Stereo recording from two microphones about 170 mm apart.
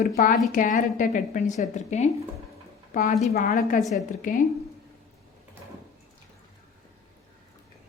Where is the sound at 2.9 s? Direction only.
50° left (ahead or behind).